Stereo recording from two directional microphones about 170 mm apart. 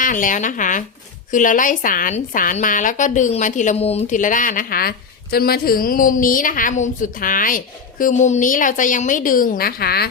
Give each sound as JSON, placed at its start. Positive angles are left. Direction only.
{"t": 0.0, "sound": "a woman's voice", "side_deg": 50}